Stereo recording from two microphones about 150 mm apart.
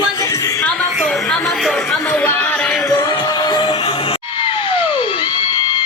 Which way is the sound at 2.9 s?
25° left (ahead or behind).